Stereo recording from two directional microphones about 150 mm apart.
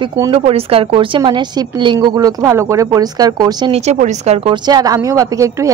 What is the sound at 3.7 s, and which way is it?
A woman's voice, 50° right (ahead or behind).